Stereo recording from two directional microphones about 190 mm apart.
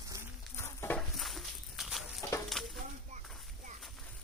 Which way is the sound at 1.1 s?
Centre (ahead or behind).